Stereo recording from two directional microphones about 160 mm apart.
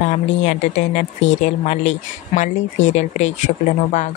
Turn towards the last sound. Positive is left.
turn(degrees=50)  # may be behind; listen again after turning